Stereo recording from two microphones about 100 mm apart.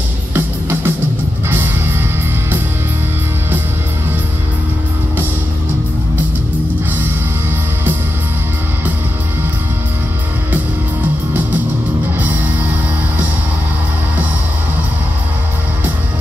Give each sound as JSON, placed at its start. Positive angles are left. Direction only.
{"t": 0.3, "sound": "music", "side_deg": -20}